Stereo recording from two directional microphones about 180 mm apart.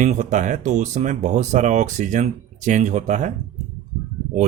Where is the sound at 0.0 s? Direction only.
45° right (ahead or behind).